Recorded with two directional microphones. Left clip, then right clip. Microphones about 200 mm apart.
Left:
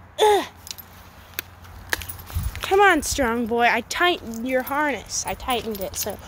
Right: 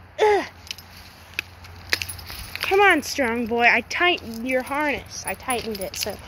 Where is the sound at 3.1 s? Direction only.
15° left (ahead or behind).